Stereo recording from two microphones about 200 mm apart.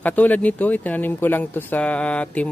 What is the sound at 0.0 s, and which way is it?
Speech, 10° left (ahead or behind).